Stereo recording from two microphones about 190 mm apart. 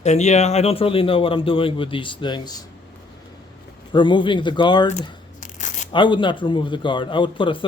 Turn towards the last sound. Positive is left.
turn(degrees=25)  # may be behind; listen again after turning